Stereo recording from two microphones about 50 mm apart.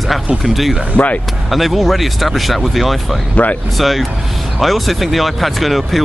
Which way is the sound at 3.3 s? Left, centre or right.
Left.